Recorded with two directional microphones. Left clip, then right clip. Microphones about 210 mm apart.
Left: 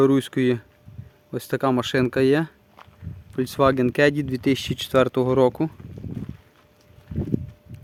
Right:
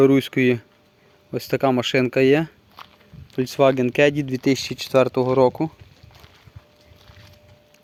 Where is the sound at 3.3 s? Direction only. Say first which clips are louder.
Right 2 dB; 10° left (ahead or behind).